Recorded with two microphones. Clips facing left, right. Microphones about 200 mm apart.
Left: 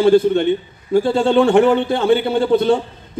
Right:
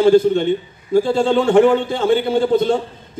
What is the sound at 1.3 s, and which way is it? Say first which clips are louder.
Speech: even; 60° left (ahead or behind).